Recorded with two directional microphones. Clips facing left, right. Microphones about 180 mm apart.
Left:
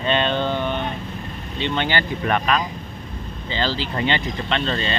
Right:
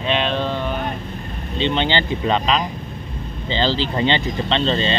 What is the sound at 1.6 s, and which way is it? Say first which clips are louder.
Speech: right 3 dB; 25° right (ahead or behind).